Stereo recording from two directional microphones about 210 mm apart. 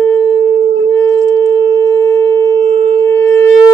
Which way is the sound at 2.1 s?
15° left (ahead or behind).